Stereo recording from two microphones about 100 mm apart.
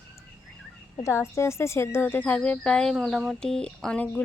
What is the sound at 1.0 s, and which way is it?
A woman's voice, 30° left (ahead or behind).